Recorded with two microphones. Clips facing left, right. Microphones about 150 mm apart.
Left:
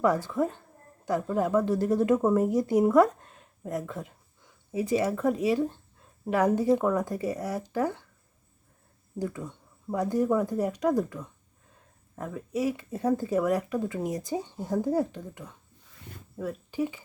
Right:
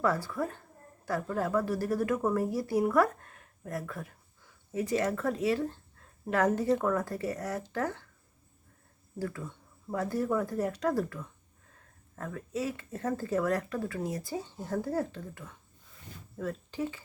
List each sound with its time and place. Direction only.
0.0 s a woman's voice: 20° left (ahead or behind)
9.1 s speech: 15° left (ahead or behind)